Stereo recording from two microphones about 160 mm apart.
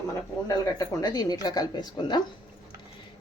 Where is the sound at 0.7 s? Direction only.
25° left (ahead or behind).